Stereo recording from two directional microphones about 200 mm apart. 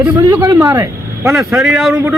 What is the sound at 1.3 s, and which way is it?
Speech, centre (ahead or behind).